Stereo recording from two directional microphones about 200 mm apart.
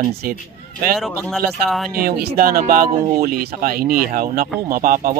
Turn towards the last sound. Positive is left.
turn(degrees=-45)  # may be behind; listen again after turning